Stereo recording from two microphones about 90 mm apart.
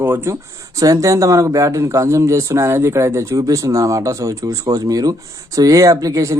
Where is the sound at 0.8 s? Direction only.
40° right (ahead or behind).